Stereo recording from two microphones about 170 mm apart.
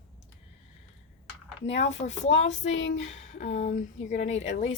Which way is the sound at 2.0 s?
45° left (ahead or behind).